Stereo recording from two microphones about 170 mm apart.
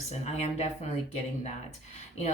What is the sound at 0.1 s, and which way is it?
Speech, 40° left (ahead or behind).